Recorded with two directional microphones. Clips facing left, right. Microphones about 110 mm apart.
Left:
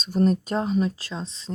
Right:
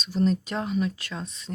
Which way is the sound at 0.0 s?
45° left (ahead or behind).